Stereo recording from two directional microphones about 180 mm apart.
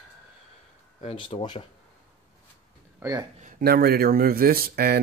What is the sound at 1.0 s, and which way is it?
Speech, 30° left (ahead or behind).